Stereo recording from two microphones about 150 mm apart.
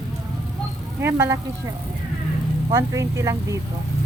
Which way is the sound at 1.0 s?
15° right (ahead or behind).